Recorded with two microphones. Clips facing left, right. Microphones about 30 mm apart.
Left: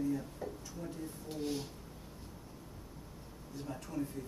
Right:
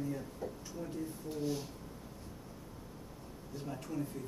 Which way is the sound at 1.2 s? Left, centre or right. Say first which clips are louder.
Even; left.